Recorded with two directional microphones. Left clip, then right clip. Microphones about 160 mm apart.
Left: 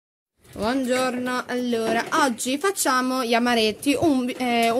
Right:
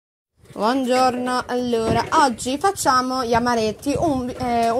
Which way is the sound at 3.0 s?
15° left (ahead or behind).